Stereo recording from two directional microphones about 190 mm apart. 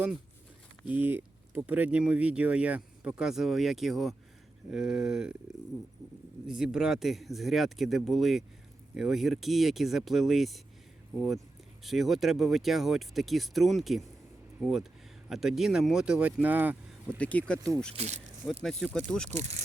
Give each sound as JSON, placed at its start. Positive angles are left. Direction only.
{"t": 0.9, "sound": "speech", "side_deg": -10}
{"t": 6.5, "sound": "speech", "side_deg": -5}
{"t": 11.8, "sound": "speech", "side_deg": 0}
{"t": 17.1, "sound": "speech", "side_deg": 5}
{"t": 17.9, "sound": "speech", "side_deg": -35}
{"t": 18.6, "sound": "speech", "side_deg": 0}
{"t": 19.3, "sound": "speech", "side_deg": -35}